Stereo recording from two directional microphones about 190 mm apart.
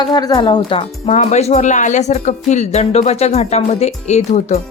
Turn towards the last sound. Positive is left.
turn(degrees=35)  # may be behind; listen again after turning